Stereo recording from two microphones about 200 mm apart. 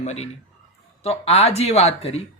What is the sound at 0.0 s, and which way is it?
A man's voice, 35° left (ahead or behind).